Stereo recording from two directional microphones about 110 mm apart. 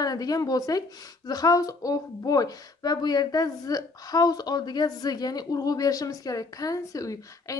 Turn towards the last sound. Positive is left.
turn(degrees=30)  # may be behind; listen again after turning